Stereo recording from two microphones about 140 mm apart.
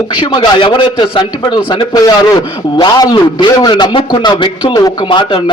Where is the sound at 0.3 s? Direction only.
30° left (ahead or behind).